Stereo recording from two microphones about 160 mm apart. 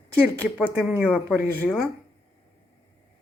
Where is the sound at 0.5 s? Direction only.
5° right (ahead or behind).